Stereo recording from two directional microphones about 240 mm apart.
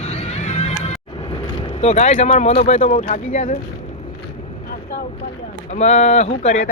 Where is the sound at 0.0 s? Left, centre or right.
Left.